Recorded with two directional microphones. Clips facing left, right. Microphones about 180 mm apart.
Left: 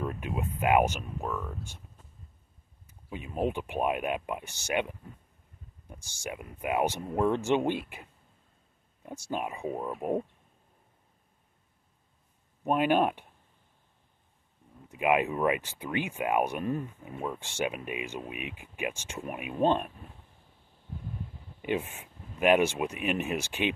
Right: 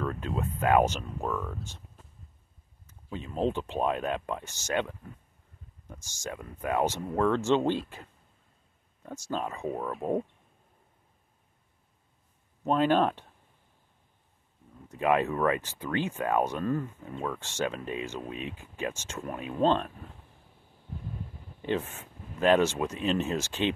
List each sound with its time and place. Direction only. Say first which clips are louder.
0.0 s speech: right 1 dB; 15° left (ahead or behind)
2.9 s speech: right 1 dB; 15° left (ahead or behind)
6.2 s speech: even; 15° left (ahead or behind)
12.6 s speech: right 1 dB; 15° left (ahead or behind)
14.9 s speech: even; 15° left (ahead or behind)
21.5 s speech: right 1 dB; 15° left (ahead or behind)